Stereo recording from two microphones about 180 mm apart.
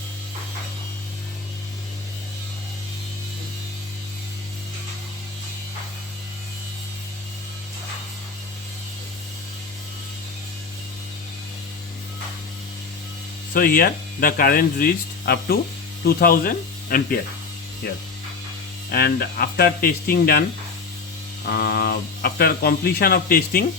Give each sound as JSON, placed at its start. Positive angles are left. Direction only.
{"t": 13.5, "sound": "speech", "side_deg": 55}
{"t": 21.5, "sound": "speech", "side_deg": 60}